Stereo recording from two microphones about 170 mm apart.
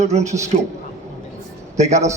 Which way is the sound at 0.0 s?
40° right (ahead or behind).